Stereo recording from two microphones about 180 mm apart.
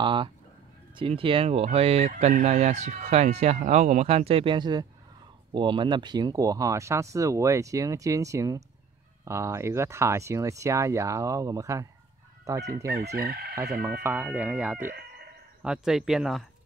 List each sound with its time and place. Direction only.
0.0 s speech: 25° right (ahead or behind)
13.1 s chicken: 60° right (ahead or behind)
14.0 s speech: 10° right (ahead or behind)
14.9 s chicken: 60° right (ahead or behind)
15.6 s speech: 5° right (ahead or behind)